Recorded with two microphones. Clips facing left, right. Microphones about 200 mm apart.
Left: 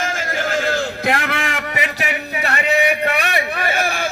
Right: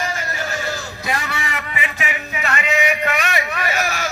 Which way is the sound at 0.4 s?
90° left.